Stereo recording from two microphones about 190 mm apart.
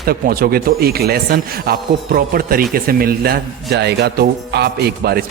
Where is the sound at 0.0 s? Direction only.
50° right (ahead or behind).